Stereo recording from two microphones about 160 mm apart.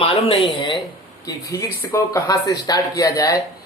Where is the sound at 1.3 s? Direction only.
20° left (ahead or behind).